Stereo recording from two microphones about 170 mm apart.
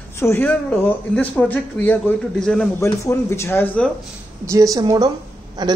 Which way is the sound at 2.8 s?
15° left (ahead or behind).